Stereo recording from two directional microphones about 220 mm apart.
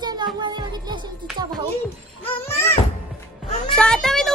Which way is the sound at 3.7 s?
5° left (ahead or behind).